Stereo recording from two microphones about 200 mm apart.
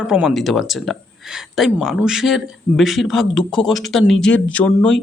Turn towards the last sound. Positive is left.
turn(degrees=0)  # may be behind; listen again after turning